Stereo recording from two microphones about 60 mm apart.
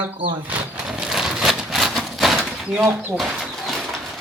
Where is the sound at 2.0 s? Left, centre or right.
Centre.